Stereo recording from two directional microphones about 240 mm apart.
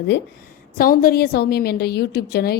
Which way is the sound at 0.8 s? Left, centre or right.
Left.